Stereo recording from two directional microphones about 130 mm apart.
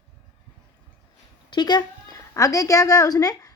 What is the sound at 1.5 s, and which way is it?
A woman's voice, 35° left (ahead or behind).